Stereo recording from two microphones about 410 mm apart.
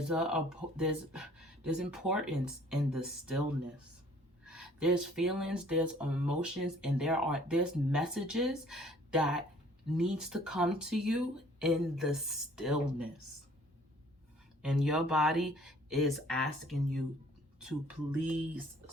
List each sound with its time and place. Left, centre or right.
0.1 s speech: centre
4.4 s speech: centre
14.6 s speech: centre